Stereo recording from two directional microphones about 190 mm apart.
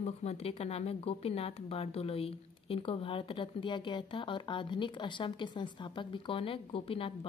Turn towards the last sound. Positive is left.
turn(degrees=30)  # may be behind; listen again after turning